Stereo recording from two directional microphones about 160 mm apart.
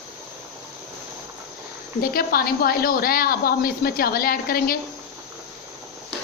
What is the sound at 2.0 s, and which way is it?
A woman's voice, 65° left (ahead or behind).